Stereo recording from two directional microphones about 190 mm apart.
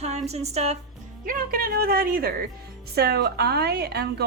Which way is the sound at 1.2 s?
45° right (ahead or behind).